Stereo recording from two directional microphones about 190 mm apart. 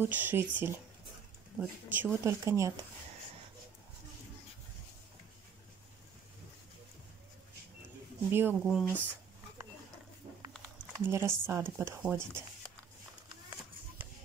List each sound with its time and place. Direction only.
0.0 s speech: 10° right (ahead or behind)
8.3 s speech: 10° right (ahead or behind)
8.6 s speech: centre (ahead or behind)
10.6 s speech: 15° right (ahead or behind)